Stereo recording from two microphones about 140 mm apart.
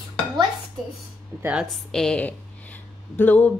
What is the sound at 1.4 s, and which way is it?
Speech, 10° right (ahead or behind).